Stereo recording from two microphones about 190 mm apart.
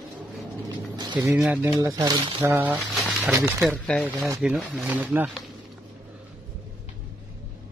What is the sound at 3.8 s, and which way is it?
Speech, 5° left (ahead or behind).